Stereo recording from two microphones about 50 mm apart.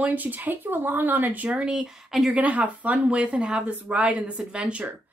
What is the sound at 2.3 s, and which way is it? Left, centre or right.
Speech, right.